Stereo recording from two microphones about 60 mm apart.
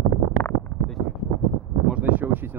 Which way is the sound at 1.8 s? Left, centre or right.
Right.